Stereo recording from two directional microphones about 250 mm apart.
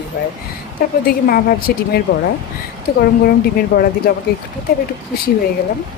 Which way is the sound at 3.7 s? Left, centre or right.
Left.